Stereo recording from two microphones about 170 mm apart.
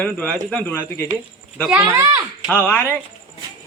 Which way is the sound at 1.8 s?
20° right (ahead or behind).